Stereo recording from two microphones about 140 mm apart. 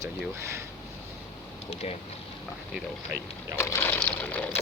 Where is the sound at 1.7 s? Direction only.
50° left (ahead or behind).